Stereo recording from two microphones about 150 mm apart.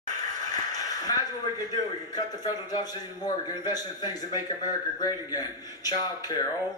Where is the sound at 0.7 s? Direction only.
25° left (ahead or behind).